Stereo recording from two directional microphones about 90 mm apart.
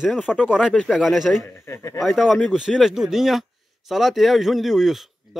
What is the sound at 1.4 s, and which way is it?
Speech, 30° left (ahead or behind).